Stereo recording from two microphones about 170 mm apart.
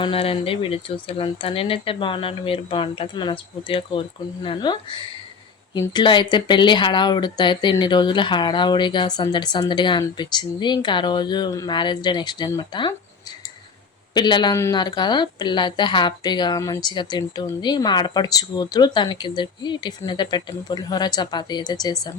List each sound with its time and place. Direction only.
0.0 s speech: 35° left (ahead or behind)
14.1 s speech: 25° left (ahead or behind)